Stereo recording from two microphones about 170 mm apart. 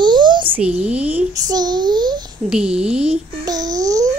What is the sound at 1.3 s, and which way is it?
Speech, 25° right (ahead or behind).